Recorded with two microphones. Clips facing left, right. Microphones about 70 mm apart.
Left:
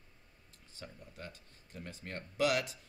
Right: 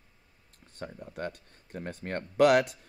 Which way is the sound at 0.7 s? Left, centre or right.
Right.